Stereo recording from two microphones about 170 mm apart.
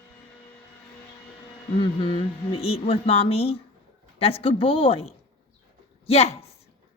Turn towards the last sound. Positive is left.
turn(degrees=35)  # may be behind; listen again after turning